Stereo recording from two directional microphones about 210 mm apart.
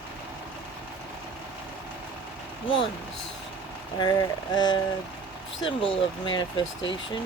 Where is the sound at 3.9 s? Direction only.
20° left (ahead or behind).